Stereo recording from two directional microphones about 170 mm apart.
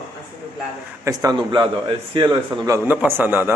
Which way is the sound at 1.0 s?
20° right (ahead or behind).